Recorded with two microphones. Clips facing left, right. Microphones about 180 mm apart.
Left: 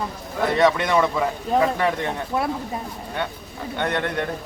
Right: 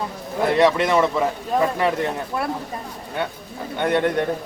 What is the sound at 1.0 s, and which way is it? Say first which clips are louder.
Speech: right 2 dB; 5° right (ahead or behind).